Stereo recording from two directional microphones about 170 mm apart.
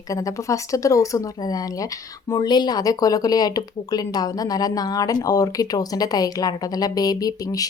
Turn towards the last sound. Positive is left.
turn(degrees=20)  # may be behind; listen again after turning